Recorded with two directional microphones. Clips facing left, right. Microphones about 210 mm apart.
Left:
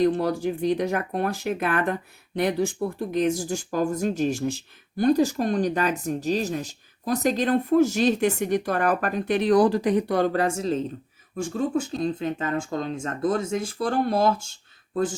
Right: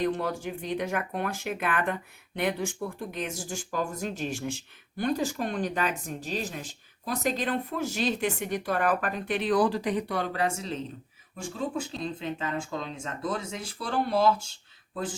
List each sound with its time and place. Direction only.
0.0 s speech: 35° left (ahead or behind)